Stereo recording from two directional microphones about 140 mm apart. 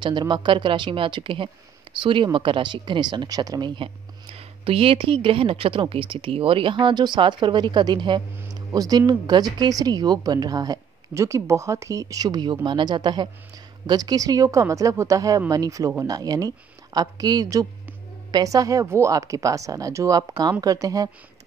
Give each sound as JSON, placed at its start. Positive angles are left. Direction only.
{"t": 0.0, "sound": "speech", "side_deg": -35}